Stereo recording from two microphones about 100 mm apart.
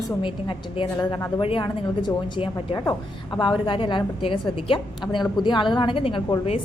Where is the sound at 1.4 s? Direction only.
60° left (ahead or behind).